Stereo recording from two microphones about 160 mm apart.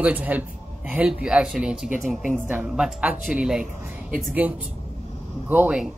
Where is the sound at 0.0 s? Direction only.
10° right (ahead or behind).